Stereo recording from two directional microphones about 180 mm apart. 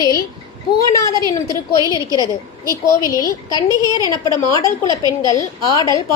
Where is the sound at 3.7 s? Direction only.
20° right (ahead or behind).